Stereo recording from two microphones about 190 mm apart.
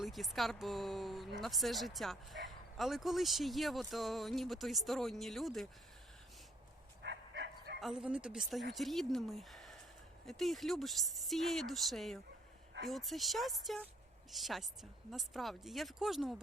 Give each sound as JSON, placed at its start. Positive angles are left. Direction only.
{"t": 0.0, "sound": "speech", "side_deg": 0}
{"t": 7.0, "sound": "bow-wow", "side_deg": -65}
{"t": 7.8, "sound": "speech", "side_deg": 0}